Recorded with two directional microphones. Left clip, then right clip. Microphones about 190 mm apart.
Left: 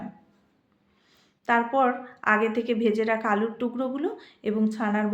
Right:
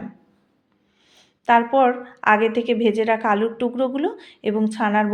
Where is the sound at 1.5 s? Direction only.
20° right (ahead or behind).